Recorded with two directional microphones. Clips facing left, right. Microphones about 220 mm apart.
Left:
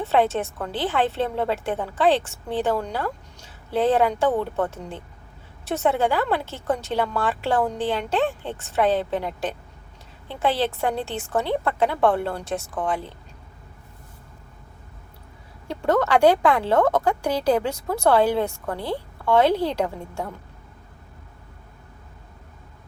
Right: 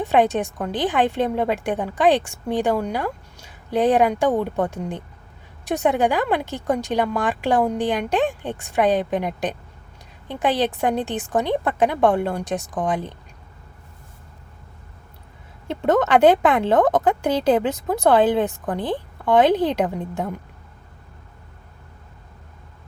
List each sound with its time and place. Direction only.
0.0 s a woman's voice: 15° right (ahead or behind)
15.6 s speech: 20° right (ahead or behind)